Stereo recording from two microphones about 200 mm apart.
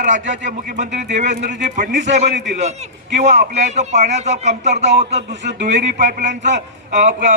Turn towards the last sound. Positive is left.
turn(degrees=-35)  # may be behind; listen again after turning